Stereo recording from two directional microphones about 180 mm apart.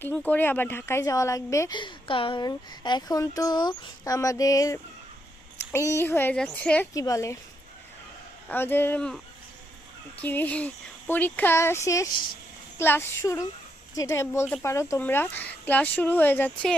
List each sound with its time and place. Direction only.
0.0 s a woman's voice: 10° left (ahead or behind)
6.9 s a woman's voice: 20° left (ahead or behind)
8.4 s a woman's voice: 10° left (ahead or behind)